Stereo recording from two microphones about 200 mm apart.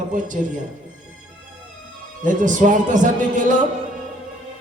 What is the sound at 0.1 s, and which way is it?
Speech, 40° right (ahead or behind).